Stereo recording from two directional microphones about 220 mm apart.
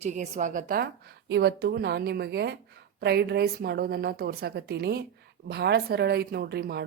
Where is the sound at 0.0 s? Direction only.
35° right (ahead or behind).